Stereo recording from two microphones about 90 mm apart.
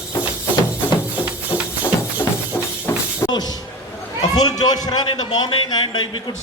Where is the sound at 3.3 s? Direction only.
50° left (ahead or behind).